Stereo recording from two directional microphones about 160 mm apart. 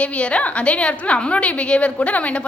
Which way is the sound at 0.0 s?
5° left (ahead or behind).